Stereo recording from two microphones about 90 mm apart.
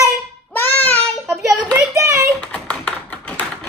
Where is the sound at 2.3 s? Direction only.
10° left (ahead or behind).